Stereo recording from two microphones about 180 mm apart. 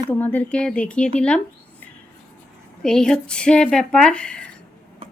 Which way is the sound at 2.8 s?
5° left (ahead or behind).